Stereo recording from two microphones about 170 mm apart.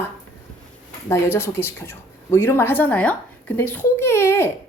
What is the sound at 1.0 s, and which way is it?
Speech, 15° left (ahead or behind).